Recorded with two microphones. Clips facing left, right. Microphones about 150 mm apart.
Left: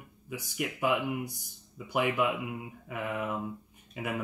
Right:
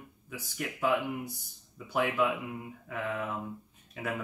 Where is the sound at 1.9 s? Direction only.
15° left (ahead or behind).